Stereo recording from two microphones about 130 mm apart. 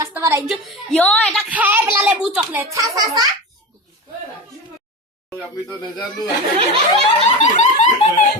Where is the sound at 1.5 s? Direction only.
10° right (ahead or behind).